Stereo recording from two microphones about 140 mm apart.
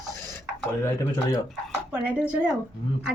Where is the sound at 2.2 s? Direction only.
10° right (ahead or behind).